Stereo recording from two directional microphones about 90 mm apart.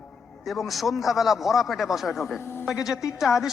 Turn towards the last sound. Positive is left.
turn(degrees=-5)  # may be behind; listen again after turning